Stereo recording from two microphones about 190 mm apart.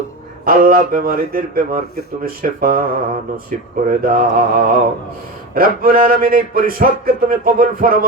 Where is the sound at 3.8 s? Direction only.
50° right (ahead or behind).